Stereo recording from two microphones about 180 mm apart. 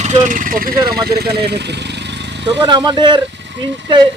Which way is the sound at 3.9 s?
25° right (ahead or behind).